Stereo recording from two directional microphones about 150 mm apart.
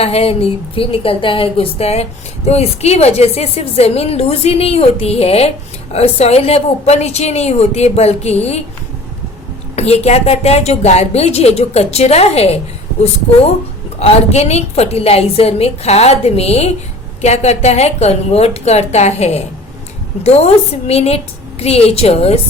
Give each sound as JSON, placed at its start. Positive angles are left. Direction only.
{"t": 0.0, "sound": "a woman's voice", "side_deg": 40}
{"t": 9.7, "sound": "a woman's voice", "side_deg": 45}
{"t": 14.0, "sound": "a woman's voice", "side_deg": 45}